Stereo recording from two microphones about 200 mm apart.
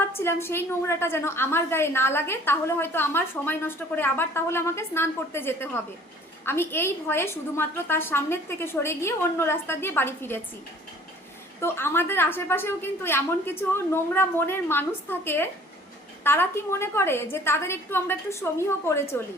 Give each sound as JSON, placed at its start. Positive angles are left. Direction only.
{"t": 0.2, "sound": "a woman's voice", "side_deg": 10}
{"t": 11.6, "sound": "a woman's voice", "side_deg": 10}